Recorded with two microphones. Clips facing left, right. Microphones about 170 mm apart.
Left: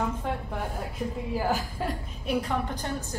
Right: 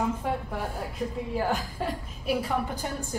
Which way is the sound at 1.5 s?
Centre (ahead or behind).